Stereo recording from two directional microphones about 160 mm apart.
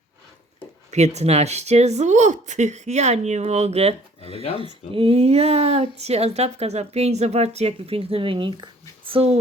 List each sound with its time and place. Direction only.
0.9 s speech: 45° right (ahead or behind)
4.4 s speech: 40° left (ahead or behind)
4.9 s speech: 40° right (ahead or behind)